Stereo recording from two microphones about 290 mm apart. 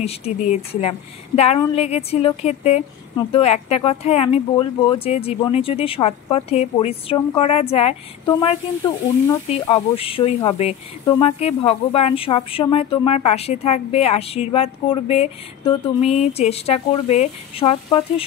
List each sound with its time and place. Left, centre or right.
0.0 s a woman's voice: left